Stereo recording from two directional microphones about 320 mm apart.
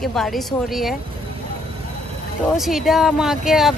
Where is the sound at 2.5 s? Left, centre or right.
Centre.